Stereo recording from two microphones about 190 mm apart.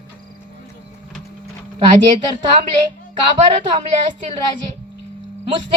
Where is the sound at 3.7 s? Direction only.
40° right (ahead or behind).